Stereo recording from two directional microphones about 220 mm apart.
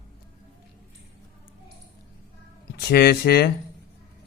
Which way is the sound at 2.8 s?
45° left (ahead or behind).